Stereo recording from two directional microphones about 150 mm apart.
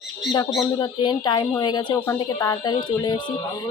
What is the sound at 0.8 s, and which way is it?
Speech, 30° left (ahead or behind).